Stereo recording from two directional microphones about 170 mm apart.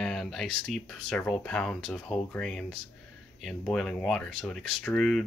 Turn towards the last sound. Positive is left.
turn(degrees=5)  # may be behind; listen again after turning